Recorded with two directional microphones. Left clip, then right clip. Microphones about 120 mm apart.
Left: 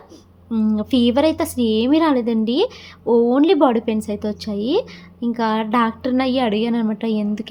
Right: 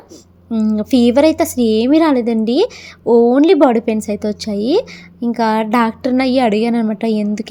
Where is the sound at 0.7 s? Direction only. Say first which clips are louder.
Right 5 dB; 40° right (ahead or behind).